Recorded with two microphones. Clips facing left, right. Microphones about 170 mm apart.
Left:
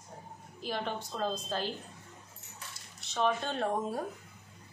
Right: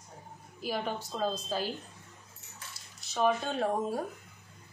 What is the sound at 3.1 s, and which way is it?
Speech, 5° right (ahead or behind).